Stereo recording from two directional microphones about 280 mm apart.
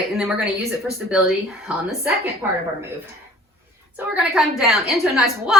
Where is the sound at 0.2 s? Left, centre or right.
Centre.